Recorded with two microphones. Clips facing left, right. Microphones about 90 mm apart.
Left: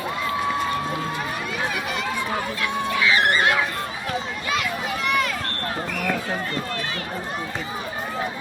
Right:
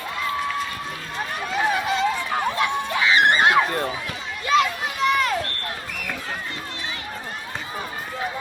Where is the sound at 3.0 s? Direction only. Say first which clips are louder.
Right 3 dB; 25° right (ahead or behind).